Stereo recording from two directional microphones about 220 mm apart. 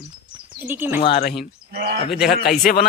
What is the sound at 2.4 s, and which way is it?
Speech, 35° left (ahead or behind).